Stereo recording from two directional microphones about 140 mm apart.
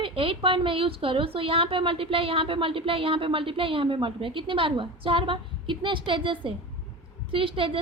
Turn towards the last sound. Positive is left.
turn(degrees=-40)  # may be behind; listen again after turning